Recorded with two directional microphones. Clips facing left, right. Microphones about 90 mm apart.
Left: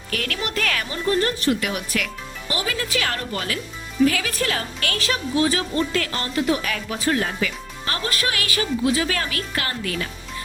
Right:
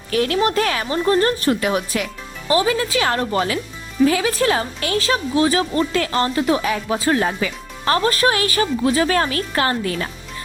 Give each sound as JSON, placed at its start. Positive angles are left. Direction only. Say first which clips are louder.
{"t": 0.1, "sound": "a woman's voice", "louder": "right 9 dB", "side_deg": -25}